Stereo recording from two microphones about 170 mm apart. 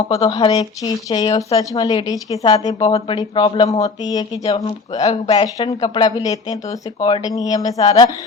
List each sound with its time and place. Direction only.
0.1 s speech: 20° left (ahead or behind)
2.8 s speech: 35° left (ahead or behind)
4.4 s speech: 40° left (ahead or behind)
5.3 s speech: 25° left (ahead or behind)